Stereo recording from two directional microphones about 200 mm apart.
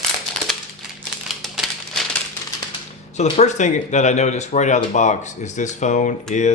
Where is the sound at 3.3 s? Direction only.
35° left (ahead or behind).